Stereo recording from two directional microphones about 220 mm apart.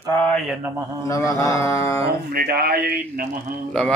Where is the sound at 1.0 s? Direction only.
15° left (ahead or behind).